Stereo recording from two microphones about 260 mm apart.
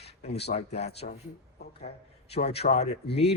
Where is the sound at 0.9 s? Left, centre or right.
Left.